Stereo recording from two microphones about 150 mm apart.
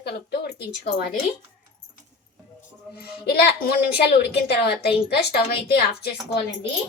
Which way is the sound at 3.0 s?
90° left.